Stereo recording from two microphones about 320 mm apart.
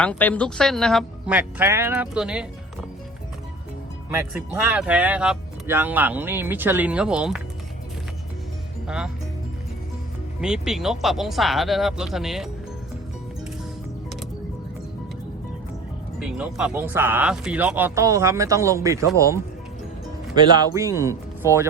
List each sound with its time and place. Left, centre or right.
0.0 s speech: centre
4.1 s speech: centre
10.4 s speech: centre
16.2 s speech: centre